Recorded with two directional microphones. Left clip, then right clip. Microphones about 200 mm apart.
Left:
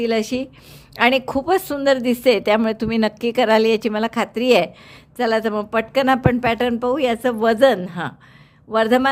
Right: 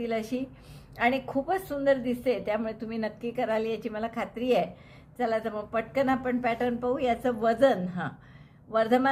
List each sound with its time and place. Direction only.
0.0 s a woman's voice: 50° left (ahead or behind)